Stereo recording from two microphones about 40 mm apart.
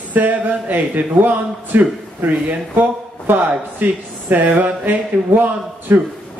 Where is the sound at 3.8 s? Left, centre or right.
Right.